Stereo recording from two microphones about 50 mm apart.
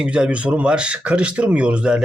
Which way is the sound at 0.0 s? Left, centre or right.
Right.